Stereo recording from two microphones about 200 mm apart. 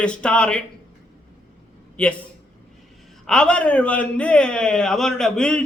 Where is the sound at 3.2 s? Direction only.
5° left (ahead or behind).